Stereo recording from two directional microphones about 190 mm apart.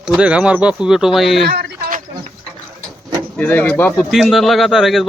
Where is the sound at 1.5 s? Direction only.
60° right (ahead or behind).